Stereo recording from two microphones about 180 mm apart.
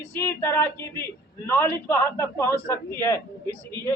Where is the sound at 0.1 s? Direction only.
15° left (ahead or behind).